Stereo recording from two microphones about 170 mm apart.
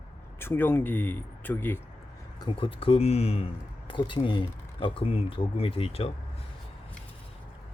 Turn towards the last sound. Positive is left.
turn(degrees=35)  # may be behind; listen again after turning